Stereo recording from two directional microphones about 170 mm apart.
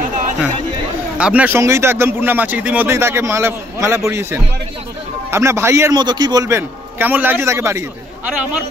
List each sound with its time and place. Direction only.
1.1 s speech: 10° right (ahead or behind)